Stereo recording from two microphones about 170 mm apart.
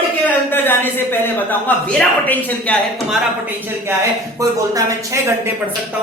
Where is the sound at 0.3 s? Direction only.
10° left (ahead or behind).